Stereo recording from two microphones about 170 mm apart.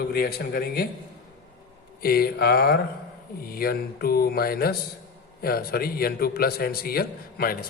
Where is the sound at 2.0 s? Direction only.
65° left (ahead or behind).